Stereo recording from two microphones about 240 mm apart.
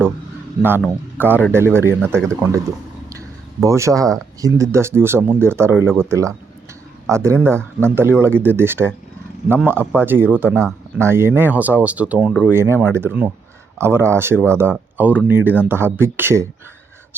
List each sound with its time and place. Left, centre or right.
1.2 s speech: centre